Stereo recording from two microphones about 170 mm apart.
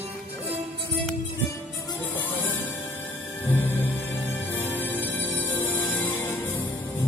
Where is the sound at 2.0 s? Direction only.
10° left (ahead or behind).